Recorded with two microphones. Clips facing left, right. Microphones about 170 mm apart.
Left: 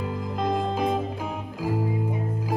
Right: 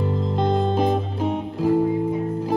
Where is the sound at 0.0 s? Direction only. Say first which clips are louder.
Right 5 dB; 30° right (ahead or behind).